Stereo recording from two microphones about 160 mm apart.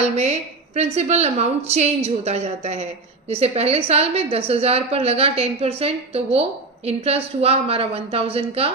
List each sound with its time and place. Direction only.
0.0 s a woman's voice: 45° right (ahead or behind)